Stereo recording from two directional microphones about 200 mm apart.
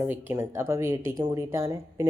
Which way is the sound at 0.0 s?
10° right (ahead or behind).